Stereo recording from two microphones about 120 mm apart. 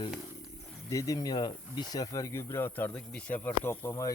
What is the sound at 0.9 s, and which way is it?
Speech, 30° left (ahead or behind).